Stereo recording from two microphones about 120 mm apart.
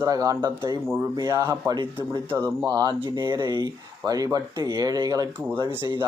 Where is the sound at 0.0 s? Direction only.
30° right (ahead or behind).